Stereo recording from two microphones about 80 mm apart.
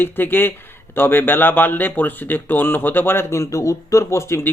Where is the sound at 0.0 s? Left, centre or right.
Left.